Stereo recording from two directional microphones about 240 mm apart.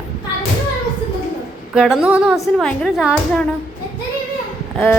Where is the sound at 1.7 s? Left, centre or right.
Centre.